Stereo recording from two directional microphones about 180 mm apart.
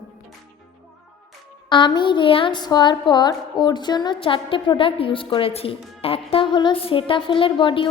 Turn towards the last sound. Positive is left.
turn(degrees=30)  # may be behind; listen again after turning